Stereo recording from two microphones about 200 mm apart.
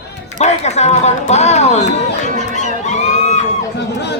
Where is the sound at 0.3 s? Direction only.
35° left (ahead or behind).